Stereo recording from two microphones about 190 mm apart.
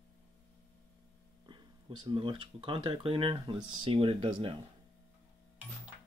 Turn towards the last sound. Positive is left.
turn(degrees=-30)  # may be behind; listen again after turning